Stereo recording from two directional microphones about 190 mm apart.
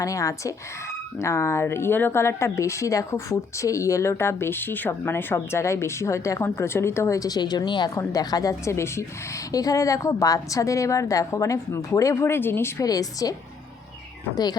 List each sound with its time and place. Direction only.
0.0 s speech: 15° left (ahead or behind)